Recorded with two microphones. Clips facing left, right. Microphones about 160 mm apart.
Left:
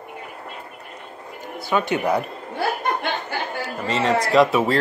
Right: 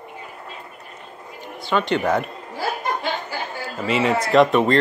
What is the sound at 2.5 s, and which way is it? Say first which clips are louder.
Chuckle: left 2 dB; 60° left (ahead or behind).